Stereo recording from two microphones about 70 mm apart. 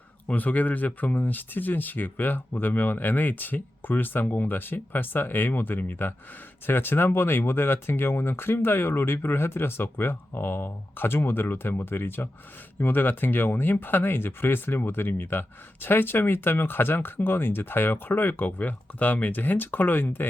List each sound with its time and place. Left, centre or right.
0.3 s speech: left